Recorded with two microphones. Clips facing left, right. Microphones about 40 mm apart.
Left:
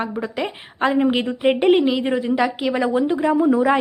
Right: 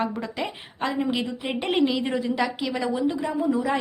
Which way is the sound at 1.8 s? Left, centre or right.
Centre.